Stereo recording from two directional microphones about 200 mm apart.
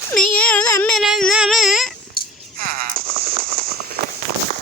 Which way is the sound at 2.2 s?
50° left (ahead or behind).